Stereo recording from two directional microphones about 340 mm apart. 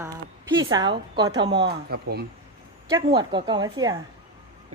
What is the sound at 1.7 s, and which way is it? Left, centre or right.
Speech, right.